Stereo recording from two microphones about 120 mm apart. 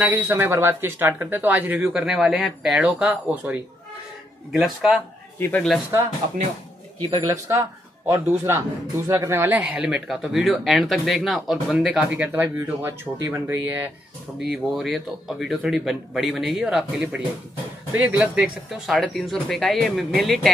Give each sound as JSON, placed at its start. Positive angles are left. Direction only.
{"t": 0.0, "sound": "a man's voice", "side_deg": -15}
{"t": 7.1, "sound": "speech", "side_deg": -30}
{"t": 14.5, "sound": "a man's voice", "side_deg": -5}